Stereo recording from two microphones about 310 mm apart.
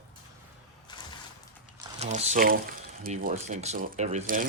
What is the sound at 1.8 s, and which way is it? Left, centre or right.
Speech, right.